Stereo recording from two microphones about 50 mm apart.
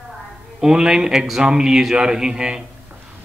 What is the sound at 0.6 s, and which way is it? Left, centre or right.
Speech, centre.